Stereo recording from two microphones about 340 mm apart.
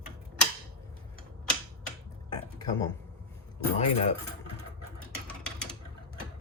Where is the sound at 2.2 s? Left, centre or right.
Centre.